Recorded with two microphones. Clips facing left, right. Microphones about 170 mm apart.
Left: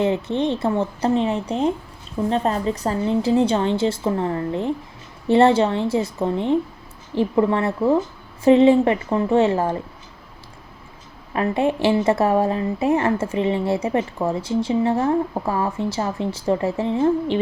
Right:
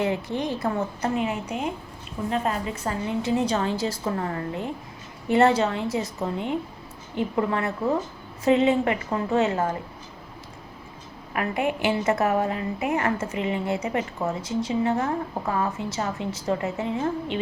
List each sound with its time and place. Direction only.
0.0 s a woman's voice: 25° left (ahead or behind)
11.3 s a woman's voice: 30° left (ahead or behind)